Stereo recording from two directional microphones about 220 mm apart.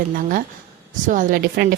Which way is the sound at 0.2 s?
40° right (ahead or behind).